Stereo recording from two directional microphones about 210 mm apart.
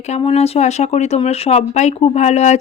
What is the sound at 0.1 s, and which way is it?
Speech, 30° left (ahead or behind).